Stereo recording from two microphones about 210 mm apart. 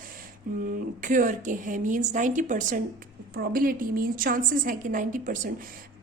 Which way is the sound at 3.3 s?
45° right (ahead or behind).